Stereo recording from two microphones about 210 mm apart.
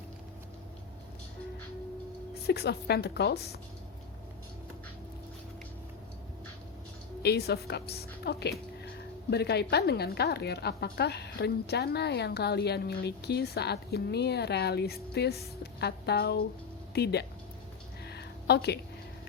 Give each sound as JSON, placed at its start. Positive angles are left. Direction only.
{"t": 2.5, "sound": "a woman's voice", "side_deg": 50}
{"t": 7.2, "sound": "a woman's voice", "side_deg": 50}
{"t": 18.0, "sound": "a sound", "side_deg": 50}